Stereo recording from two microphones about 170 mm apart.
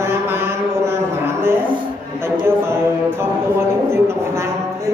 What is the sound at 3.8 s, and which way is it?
Speech, 15° right (ahead or behind).